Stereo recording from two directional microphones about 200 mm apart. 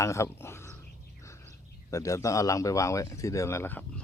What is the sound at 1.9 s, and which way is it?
Speech, 15° left (ahead or behind).